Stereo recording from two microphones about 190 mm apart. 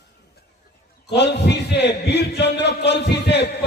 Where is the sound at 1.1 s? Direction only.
65° left (ahead or behind).